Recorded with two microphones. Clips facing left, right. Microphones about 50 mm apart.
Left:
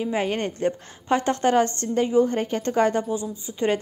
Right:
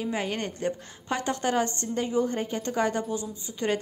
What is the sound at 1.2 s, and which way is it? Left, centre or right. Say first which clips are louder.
A woman's voice: left 5 dB; left.